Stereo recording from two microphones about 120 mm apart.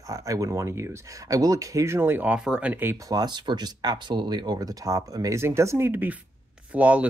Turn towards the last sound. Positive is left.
turn(degrees=-10)  # may be behind; listen again after turning